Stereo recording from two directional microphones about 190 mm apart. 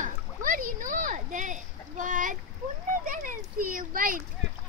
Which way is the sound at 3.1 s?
45° right (ahead or behind).